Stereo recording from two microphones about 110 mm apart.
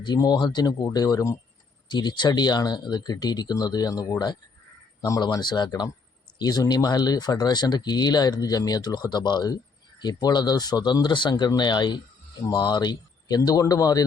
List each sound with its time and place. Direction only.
0.0 s speech: 40° left (ahead or behind)
1.9 s speech: 45° left (ahead or behind)
5.2 s speech: 40° left (ahead or behind)